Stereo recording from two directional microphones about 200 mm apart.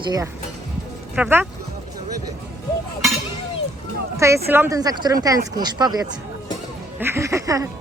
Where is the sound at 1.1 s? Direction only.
10° right (ahead or behind).